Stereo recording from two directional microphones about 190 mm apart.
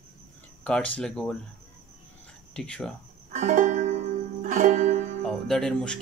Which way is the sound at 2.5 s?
5° left (ahead or behind).